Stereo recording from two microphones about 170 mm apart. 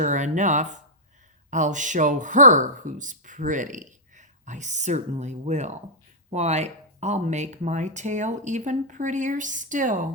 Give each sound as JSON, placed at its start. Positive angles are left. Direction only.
{"t": 0.0, "sound": "speech", "side_deg": -45}